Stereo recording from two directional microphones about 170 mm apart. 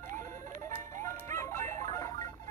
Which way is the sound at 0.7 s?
15° left (ahead or behind).